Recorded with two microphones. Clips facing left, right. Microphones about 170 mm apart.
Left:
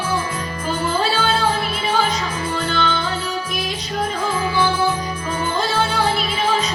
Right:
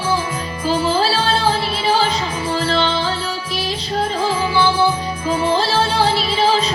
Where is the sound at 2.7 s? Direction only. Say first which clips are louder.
Right 3 dB; 30° right (ahead or behind).